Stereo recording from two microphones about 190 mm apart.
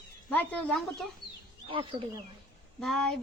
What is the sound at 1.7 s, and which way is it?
Speech, 30° right (ahead or behind).